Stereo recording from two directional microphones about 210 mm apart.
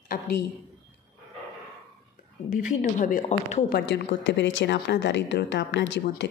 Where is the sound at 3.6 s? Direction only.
50° left (ahead or behind).